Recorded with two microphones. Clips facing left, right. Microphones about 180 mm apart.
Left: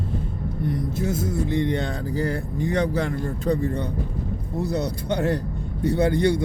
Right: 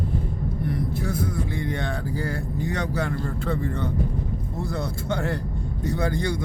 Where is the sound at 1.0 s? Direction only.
20° left (ahead or behind).